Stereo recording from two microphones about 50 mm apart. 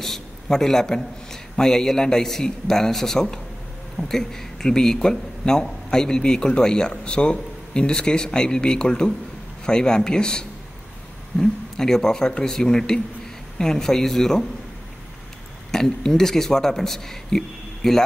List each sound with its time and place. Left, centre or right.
0.0 s speech: centre
15.7 s speech: centre